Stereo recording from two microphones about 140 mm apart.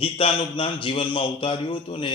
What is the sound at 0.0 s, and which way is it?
A man's voice, 40° left (ahead or behind).